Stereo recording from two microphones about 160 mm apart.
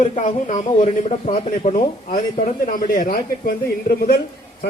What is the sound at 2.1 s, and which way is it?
Speech, 60° left (ahead or behind).